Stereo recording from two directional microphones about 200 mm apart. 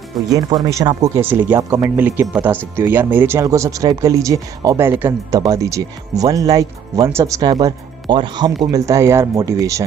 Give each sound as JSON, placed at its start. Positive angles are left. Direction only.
{"t": 0.3, "sound": "speech", "side_deg": -20}